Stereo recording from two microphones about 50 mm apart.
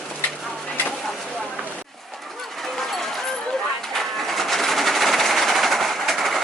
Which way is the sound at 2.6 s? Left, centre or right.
Centre.